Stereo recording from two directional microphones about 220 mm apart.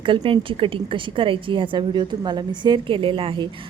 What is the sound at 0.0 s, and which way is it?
A woman's voice, 20° right (ahead or behind).